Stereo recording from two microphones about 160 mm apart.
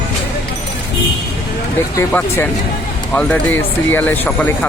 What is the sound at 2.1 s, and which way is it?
Speech, 10° left (ahead or behind).